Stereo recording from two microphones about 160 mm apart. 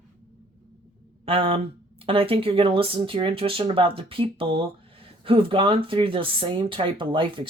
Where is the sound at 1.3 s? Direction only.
35° right (ahead or behind).